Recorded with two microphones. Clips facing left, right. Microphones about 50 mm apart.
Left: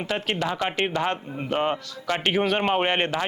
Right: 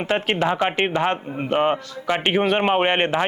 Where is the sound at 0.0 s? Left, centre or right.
Right.